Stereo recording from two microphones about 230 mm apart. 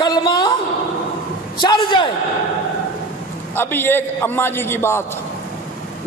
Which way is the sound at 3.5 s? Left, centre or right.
Centre.